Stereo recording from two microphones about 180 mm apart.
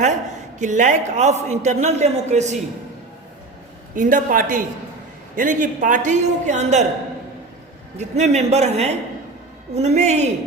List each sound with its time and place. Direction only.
0.6 s a man's voice: 45° right (ahead or behind)
3.9 s a man's voice: 45° right (ahead or behind)
7.9 s a man's voice: 40° right (ahead or behind)